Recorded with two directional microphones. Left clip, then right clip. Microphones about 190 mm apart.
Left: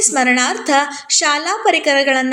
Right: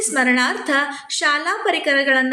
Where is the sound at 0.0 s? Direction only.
20° left (ahead or behind).